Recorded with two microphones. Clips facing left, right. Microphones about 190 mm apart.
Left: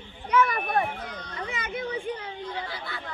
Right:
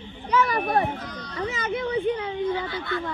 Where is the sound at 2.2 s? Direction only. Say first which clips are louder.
Right 9 dB; 60° right (ahead or behind).